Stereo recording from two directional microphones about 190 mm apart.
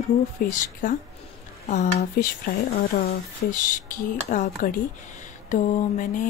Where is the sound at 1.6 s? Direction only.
40° left (ahead or behind).